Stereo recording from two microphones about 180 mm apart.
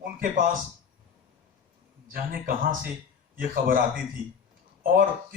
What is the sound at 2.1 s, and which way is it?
A man's voice, 55° right (ahead or behind).